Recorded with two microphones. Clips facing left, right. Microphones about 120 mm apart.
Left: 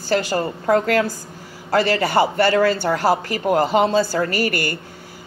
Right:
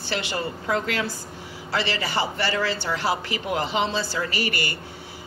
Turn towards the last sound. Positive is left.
turn(degrees=50)  # may be behind; listen again after turning